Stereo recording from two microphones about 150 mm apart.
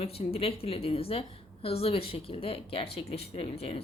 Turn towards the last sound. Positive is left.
turn(degrees=40)  # may be behind; listen again after turning